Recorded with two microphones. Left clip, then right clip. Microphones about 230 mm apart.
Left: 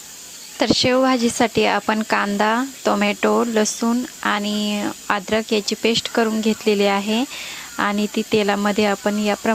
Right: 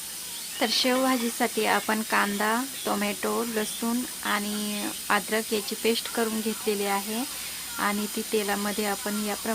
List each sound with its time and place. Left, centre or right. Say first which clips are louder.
0.6 s speech: left 8 dB; left